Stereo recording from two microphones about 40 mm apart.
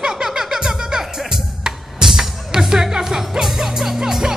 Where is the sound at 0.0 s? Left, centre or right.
Centre.